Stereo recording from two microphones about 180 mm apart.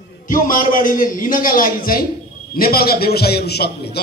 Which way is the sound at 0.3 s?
50° left (ahead or behind).